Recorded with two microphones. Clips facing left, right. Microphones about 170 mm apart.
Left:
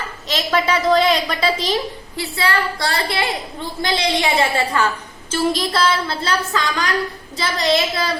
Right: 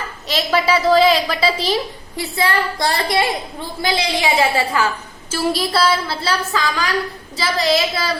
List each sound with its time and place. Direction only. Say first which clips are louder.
0.3 s a woman's voice: right 2 dB; 10° right (ahead or behind)
2.1 s a woman's voice: right 2 dB; 20° right (ahead or behind)
3.8 s a woman's voice: even; 5° right (ahead or behind)